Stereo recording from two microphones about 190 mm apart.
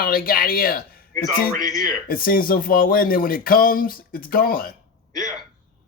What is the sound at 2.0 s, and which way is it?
Speech, 50° left (ahead or behind).